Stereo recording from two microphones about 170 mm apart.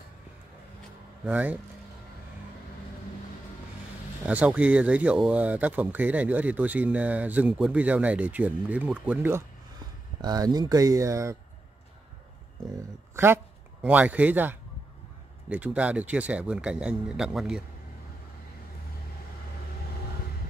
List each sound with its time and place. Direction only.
1.2 s speech: 10° right (ahead or behind)
4.3 s speech: 10° right (ahead or behind)
10.2 s speech: 25° right (ahead or behind)
13.1 s speech: 15° right (ahead or behind)